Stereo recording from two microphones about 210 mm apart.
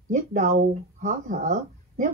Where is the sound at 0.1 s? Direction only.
35° right (ahead or behind).